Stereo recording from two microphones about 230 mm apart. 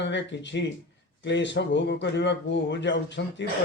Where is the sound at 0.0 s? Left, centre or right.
Left.